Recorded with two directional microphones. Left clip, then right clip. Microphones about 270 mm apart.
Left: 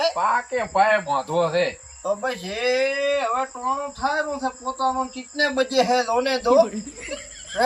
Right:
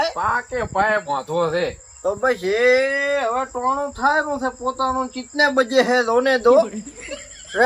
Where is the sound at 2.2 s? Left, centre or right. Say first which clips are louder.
Right 11 dB; centre.